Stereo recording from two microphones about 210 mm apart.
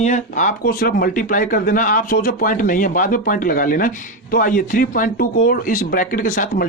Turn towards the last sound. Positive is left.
turn(degrees=40)  # may be behind; listen again after turning